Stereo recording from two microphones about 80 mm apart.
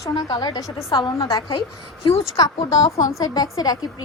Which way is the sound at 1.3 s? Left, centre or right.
Left.